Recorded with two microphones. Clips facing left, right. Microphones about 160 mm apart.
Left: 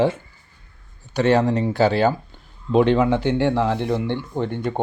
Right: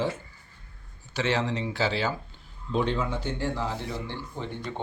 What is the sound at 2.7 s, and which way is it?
Speech, 70° left (ahead or behind).